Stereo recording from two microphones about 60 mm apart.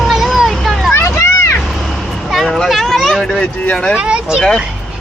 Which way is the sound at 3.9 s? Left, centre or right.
Centre.